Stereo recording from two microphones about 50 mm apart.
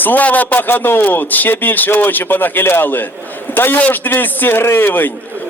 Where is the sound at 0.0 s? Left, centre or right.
Left.